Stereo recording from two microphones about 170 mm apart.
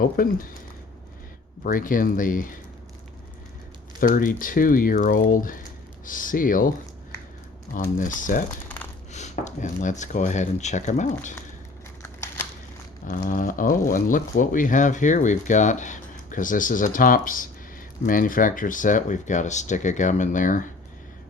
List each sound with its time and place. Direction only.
0.0 s speech: 55° left (ahead or behind)
1.6 s speech: 55° left (ahead or behind)
4.0 s speech: 55° left (ahead or behind)
13.1 s speech: 55° left (ahead or behind)